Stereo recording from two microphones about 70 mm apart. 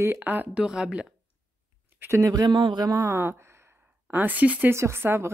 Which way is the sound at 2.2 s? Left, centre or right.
Right.